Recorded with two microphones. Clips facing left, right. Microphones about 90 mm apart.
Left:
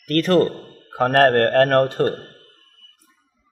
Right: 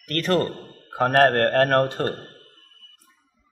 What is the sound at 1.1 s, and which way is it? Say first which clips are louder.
Speech: left 3 dB; 40° left (ahead or behind).